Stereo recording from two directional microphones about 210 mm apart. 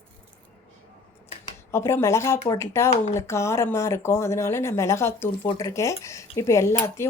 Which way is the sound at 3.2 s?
15° left (ahead or behind).